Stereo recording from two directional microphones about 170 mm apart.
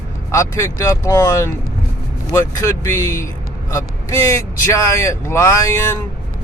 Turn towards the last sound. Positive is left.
turn(degrees=15)  # may be behind; listen again after turning